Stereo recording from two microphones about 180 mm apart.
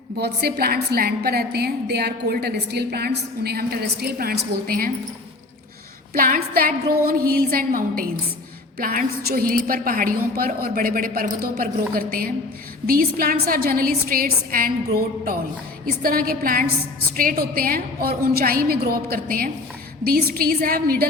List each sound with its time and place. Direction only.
0.2 s a woman's voice: 60° right (ahead or behind)
6.1 s a woman's voice: 50° right (ahead or behind)